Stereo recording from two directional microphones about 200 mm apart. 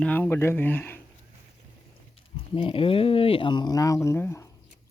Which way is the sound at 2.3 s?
25° left (ahead or behind).